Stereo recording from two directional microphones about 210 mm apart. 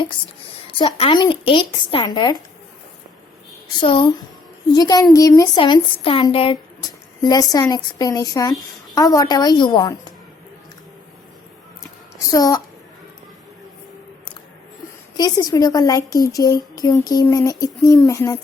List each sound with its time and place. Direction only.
0.8 s speech: 25° left (ahead or behind)
3.8 s a woman's voice: 25° left (ahead or behind)
12.3 s a woman's voice: 15° left (ahead or behind)
15.1 s a woman's voice: 20° left (ahead or behind)